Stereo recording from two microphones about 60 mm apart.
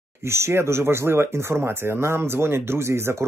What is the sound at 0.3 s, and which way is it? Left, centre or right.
Speech, right.